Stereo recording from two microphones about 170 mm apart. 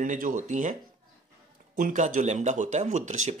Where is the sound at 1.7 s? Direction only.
50° right (ahead or behind).